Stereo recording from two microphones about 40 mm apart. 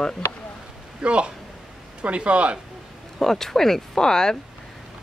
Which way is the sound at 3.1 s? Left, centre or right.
Centre.